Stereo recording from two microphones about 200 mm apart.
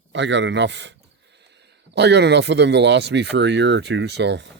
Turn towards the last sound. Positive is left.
turn(degrees=-60)  # may be behind; listen again after turning